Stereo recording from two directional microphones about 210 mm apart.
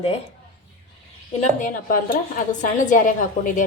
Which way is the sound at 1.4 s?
40° left (ahead or behind).